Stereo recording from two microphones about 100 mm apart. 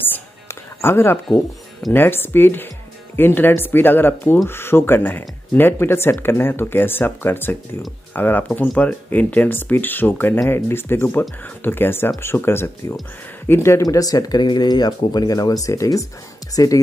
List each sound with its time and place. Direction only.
0.7 s speech: 25° left (ahead or behind)
13.8 s speech: 40° left (ahead or behind)